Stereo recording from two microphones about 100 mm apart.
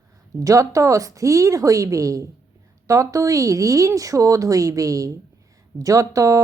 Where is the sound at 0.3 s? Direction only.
35° right (ahead or behind).